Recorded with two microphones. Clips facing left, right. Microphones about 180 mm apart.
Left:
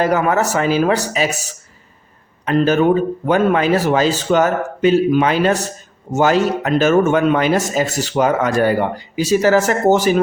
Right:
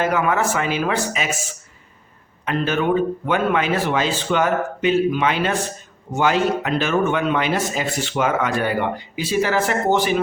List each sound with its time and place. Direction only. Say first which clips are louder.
0.0 s speech: left 4 dB; 40° left (ahead or behind)